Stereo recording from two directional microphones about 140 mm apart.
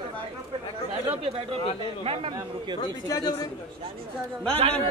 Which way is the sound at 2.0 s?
45° right (ahead or behind).